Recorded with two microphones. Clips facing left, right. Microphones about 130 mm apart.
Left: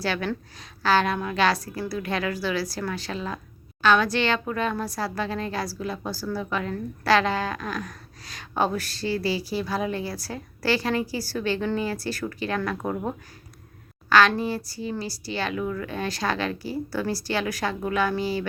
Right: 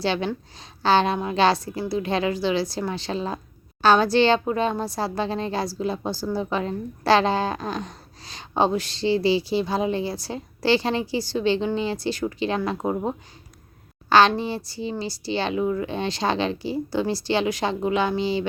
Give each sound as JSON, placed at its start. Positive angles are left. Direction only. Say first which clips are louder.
{"t": 0.0, "sound": "a woman's voice", "louder": "right 3 dB", "side_deg": -25}